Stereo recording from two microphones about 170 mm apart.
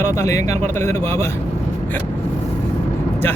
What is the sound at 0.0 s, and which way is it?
Speech, 15° left (ahead or behind).